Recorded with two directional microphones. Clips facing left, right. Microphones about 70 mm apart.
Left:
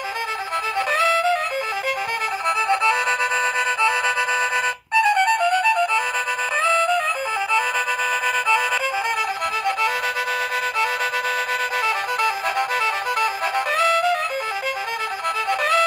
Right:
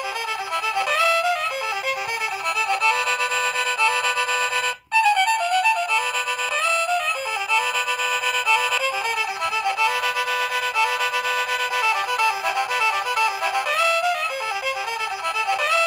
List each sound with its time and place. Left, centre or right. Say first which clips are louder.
0.7 s music: left 1 dB; left
2.7 s music: left 1 dB; left
4.9 s music: left 1 dB; left
9.7 s music: even; left
11.8 s music: right 3 dB; left